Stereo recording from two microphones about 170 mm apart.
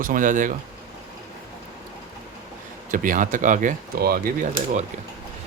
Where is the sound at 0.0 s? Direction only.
55° right (ahead or behind).